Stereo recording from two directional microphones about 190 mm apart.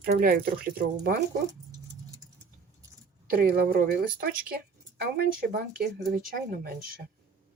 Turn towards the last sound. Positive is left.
turn(degrees=-50)  # may be behind; listen again after turning